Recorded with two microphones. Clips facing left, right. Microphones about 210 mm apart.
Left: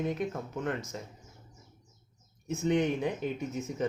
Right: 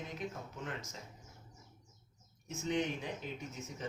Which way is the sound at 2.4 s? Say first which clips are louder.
Left 8 dB; 60° left (ahead or behind).